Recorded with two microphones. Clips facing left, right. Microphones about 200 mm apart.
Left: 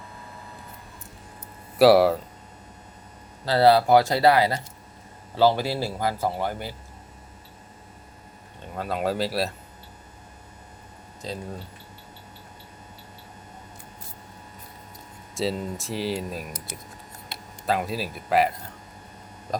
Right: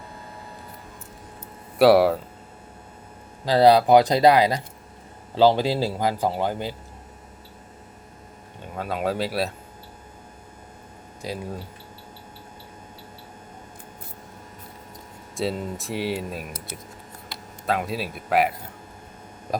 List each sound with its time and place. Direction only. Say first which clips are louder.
1.8 s speech: even; centre (ahead or behind)
3.4 s speech: right 2 dB; 15° right (ahead or behind)
8.7 s speech: even; centre (ahead or behind)
11.2 s speech: right 2 dB; 10° right (ahead or behind)
15.4 s speech: even; centre (ahead or behind)
17.7 s speech: even; centre (ahead or behind)